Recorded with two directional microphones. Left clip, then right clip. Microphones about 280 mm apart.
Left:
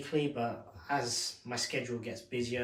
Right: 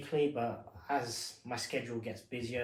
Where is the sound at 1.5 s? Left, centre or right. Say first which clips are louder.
Left 1 dB; centre.